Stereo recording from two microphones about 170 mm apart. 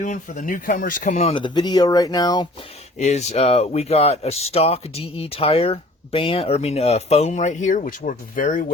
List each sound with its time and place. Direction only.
0.0 s speech: 50° left (ahead or behind)
1.3 s speech: 30° left (ahead or behind)
3.0 s speech: 40° left (ahead or behind)